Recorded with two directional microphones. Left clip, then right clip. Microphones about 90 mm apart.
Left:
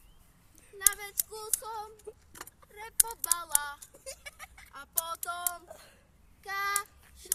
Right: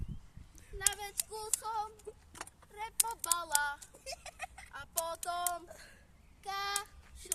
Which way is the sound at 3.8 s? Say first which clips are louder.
Left 1 dB; centre (ahead or behind).